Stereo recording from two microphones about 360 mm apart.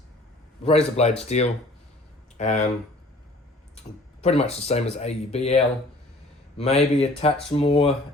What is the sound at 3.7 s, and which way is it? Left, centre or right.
Speech, centre.